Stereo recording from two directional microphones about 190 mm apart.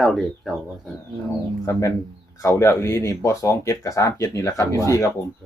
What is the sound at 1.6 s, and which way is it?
Speech, 15° left (ahead or behind).